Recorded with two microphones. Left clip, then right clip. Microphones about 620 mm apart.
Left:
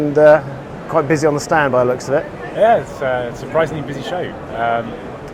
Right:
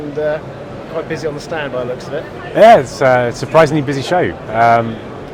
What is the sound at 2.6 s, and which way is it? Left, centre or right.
A man's voice, right.